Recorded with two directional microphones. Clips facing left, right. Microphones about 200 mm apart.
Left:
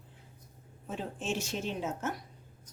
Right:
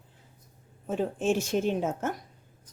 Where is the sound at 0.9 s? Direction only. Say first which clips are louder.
Right 9 dB; 50° right (ahead or behind).